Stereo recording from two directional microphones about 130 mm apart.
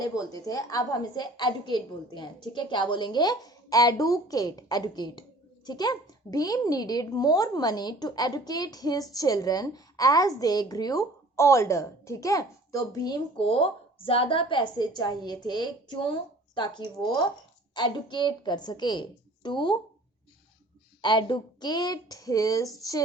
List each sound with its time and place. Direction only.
0.4 s a woman's voice: 30° left (ahead or behind)
13.3 s a woman's voice: 45° left (ahead or behind)
21.0 s a woman's voice: 35° left (ahead or behind)